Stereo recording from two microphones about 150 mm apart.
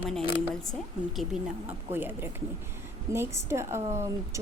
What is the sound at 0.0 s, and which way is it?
A woman's voice, centre (ahead or behind).